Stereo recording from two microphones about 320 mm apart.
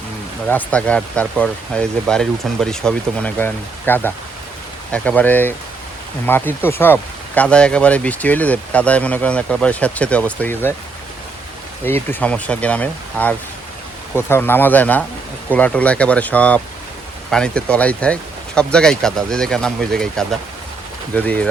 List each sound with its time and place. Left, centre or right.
0.4 s speech: centre
11.9 s speech: centre